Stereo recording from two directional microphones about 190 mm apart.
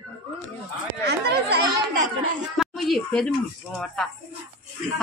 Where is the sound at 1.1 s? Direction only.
60° right (ahead or behind).